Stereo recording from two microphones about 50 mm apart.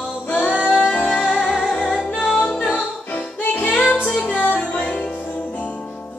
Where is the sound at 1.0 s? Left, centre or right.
Left.